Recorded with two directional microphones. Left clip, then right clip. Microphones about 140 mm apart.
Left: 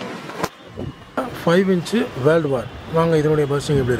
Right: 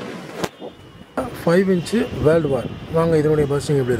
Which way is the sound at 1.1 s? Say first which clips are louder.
Even; 5° right (ahead or behind).